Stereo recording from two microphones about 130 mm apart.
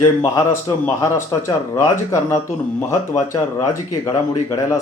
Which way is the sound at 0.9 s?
20° left (ahead or behind).